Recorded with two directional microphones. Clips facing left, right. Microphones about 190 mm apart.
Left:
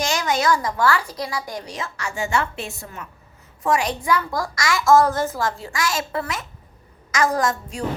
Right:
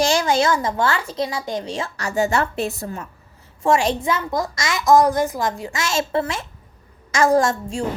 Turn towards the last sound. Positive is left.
turn(degrees=-30)  # may be behind; listen again after turning